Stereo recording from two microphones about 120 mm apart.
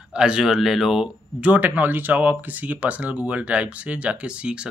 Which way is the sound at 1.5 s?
15° right (ahead or behind).